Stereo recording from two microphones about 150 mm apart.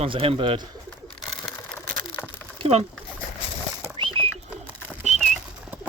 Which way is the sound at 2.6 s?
45° right (ahead or behind).